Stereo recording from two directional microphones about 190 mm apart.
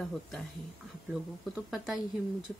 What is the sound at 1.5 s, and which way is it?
Speech, 5° right (ahead or behind).